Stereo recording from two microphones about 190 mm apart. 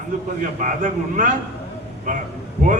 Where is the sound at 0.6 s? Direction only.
40° right (ahead or behind).